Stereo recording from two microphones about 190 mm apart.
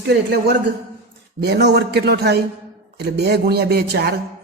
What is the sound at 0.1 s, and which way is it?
A man's voice, 60° right (ahead or behind).